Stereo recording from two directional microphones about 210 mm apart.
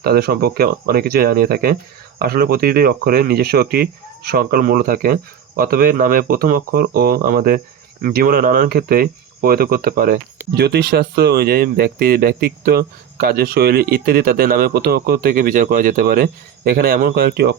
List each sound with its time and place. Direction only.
0.0 s speech: 50° right (ahead or behind)